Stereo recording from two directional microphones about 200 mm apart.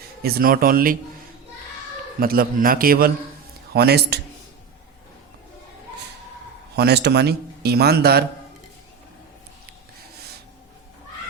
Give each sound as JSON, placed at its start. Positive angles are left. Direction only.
{"t": 0.2, "sound": "speech", "side_deg": -50}
{"t": 2.2, "sound": "speech", "side_deg": -50}
{"t": 6.7, "sound": "speech", "side_deg": -55}